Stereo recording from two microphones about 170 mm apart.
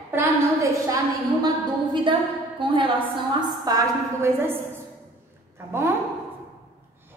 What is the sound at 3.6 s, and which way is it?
Speech, 20° right (ahead or behind).